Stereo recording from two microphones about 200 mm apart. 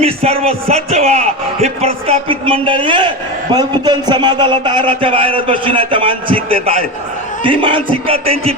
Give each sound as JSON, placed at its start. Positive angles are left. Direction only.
{"t": 0.0, "sound": "a man's voice", "side_deg": -30}